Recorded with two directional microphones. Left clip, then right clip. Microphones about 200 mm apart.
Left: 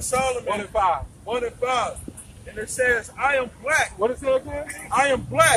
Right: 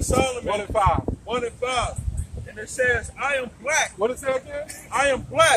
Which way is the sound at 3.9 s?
20° right (ahead or behind).